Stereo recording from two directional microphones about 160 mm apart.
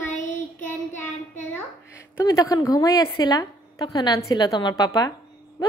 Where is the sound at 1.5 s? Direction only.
20° left (ahead or behind).